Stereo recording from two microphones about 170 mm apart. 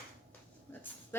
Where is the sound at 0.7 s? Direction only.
10° left (ahead or behind).